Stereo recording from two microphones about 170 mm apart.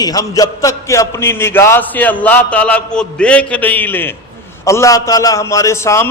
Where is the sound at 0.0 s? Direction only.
20° left (ahead or behind).